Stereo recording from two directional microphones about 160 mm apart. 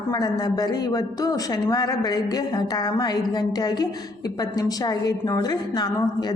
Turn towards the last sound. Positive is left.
turn(degrees=25)  # may be behind; listen again after turning